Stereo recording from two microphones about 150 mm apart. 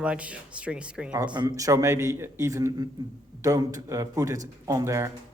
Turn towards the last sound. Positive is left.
turn(degrees=-20)  # may be behind; listen again after turning